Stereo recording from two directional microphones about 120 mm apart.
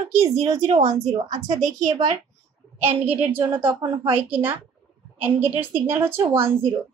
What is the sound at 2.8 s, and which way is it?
A woman's voice, 15° right (ahead or behind).